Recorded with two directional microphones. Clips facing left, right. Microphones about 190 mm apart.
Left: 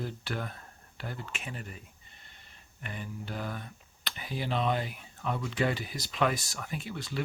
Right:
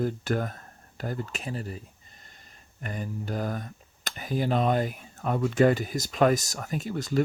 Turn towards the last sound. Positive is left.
turn(degrees=-45)  # may be behind; listen again after turning